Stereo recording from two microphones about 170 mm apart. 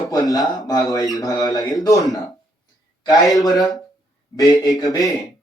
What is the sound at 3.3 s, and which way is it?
Speech, 20° left (ahead or behind).